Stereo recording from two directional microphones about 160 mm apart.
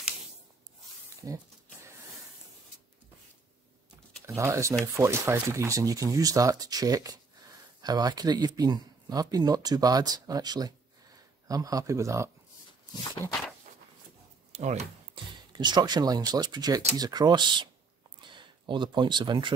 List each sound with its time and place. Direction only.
1.2 s speech: 20° right (ahead or behind)
4.4 s speech: 20° right (ahead or behind)
14.5 s speech: 45° right (ahead or behind)
15.5 s speech: 25° right (ahead or behind)